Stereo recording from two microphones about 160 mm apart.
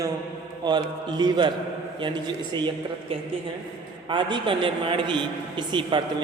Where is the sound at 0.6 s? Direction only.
25° right (ahead or behind).